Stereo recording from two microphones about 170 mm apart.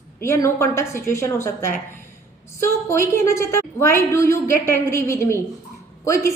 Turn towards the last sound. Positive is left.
turn(degrees=15)  # may be behind; listen again after turning